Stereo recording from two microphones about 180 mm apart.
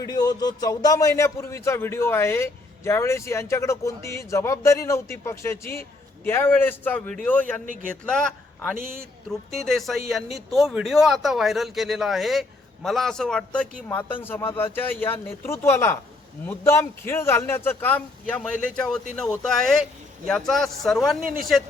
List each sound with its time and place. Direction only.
0.0 s a man's voice: 20° left (ahead or behind); by 21.2 s centre (ahead or behind)